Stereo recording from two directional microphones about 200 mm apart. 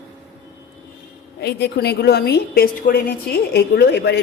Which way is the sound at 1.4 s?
55° left (ahead or behind).